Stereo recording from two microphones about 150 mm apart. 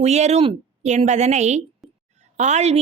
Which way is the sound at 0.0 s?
45° right (ahead or behind).